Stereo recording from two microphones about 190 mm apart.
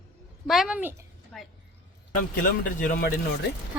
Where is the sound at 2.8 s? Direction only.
45° left (ahead or behind).